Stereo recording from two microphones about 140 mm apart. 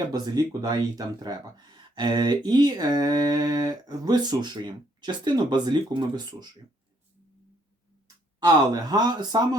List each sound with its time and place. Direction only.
0.1 s speech: 30° right (ahead or behind)
8.0 s speech: 25° right (ahead or behind)